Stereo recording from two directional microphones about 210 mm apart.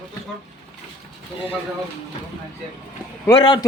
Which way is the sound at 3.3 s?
20° left (ahead or behind).